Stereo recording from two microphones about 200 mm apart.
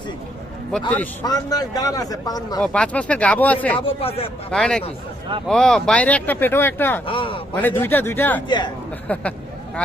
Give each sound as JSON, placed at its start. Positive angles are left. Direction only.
{"t": 0.7, "sound": "speech", "side_deg": 5}
{"t": 1.2, "sound": "a man's voice", "side_deg": 20}
{"t": 2.6, "sound": "speech", "side_deg": 5}
{"t": 3.8, "sound": "a man's voice", "side_deg": 30}
{"t": 4.5, "sound": "speech", "side_deg": 0}
{"t": 7.1, "sound": "a man's voice", "side_deg": 25}
{"t": 7.5, "sound": "speech", "side_deg": 10}
{"t": 8.4, "sound": "a man's voice", "side_deg": 20}
{"t": 9.1, "sound": "speech", "side_deg": 5}